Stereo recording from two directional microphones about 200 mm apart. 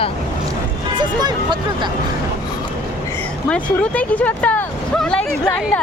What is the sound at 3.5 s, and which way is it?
Speech, 5° left (ahead or behind).